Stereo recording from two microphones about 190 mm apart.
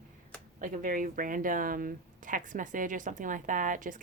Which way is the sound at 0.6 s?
45° right (ahead or behind).